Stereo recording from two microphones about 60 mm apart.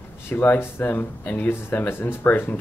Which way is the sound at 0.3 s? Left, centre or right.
Left.